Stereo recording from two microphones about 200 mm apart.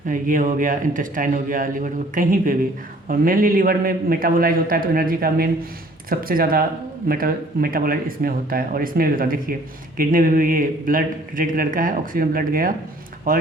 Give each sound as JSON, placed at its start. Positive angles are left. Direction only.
{"t": 0.1, "sound": "a man's voice", "side_deg": -40}